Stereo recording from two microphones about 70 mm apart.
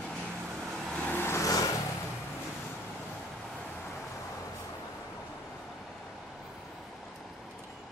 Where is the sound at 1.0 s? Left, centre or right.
Left.